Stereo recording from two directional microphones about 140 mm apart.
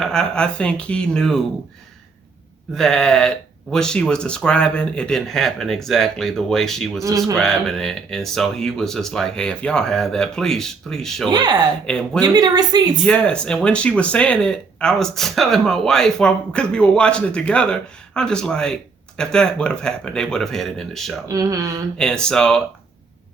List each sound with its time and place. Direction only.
0.0 s speech: 5° left (ahead or behind)
2.7 s speech: 5° left (ahead or behind)
11.3 s a woman's voice: 30° right (ahead or behind)
11.9 s speech: 5° left (ahead or behind)
12.2 s a woman's voice: 30° right (ahead or behind)
13.1 s speech: 5° left (ahead or behind)
21.2 s a woman's voice: 25° right (ahead or behind)
21.9 s speech: 5° left (ahead or behind)